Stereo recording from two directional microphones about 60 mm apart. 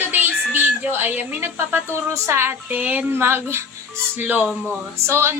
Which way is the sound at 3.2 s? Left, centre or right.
Right.